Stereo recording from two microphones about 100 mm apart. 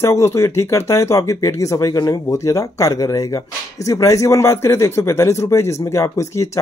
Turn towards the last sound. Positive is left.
turn(degrees=30)  # may be behind; listen again after turning